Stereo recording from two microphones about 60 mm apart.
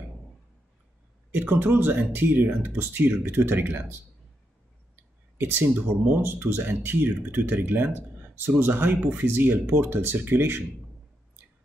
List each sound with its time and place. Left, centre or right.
1.3 s speech: right
5.4 s speech: right